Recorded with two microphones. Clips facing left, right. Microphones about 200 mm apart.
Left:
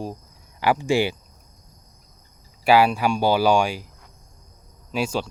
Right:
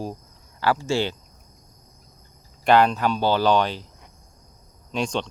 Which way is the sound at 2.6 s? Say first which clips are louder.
Left 1 dB; 10° left (ahead or behind).